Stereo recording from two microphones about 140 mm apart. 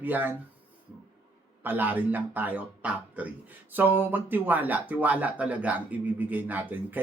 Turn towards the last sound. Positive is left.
turn(degrees=-15)  # may be behind; listen again after turning